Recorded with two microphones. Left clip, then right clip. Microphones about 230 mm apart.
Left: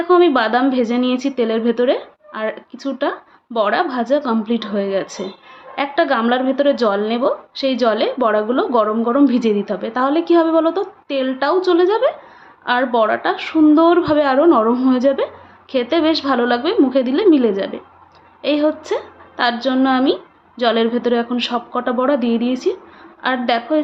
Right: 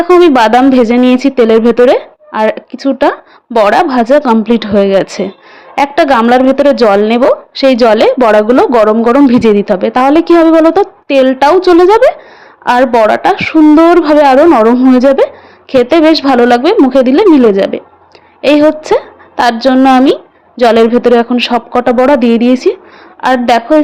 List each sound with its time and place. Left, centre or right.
0.0 s a woman's voice: right